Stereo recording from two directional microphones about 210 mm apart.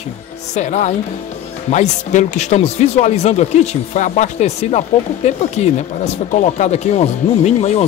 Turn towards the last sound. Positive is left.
turn(degrees=30)  # may be behind; listen again after turning